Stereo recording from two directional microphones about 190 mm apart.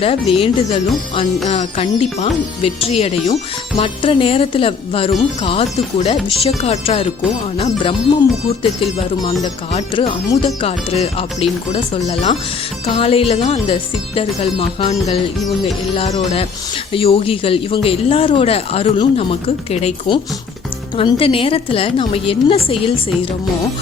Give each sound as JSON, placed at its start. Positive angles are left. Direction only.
{"t": 0.0, "sound": "speech", "side_deg": 30}